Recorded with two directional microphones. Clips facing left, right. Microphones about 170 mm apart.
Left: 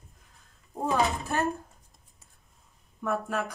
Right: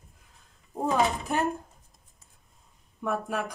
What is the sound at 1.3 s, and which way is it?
Speech, 15° right (ahead or behind).